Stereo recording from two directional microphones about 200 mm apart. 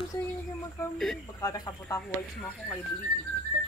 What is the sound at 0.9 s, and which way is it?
Speech, centre (ahead or behind).